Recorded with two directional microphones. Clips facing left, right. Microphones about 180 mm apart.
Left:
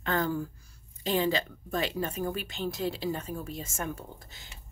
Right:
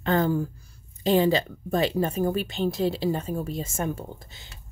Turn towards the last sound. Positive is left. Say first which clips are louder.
# right 6 dB
turn(degrees=-30)  # may be behind; listen again after turning